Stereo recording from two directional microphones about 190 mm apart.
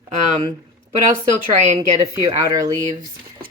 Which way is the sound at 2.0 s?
20° right (ahead or behind).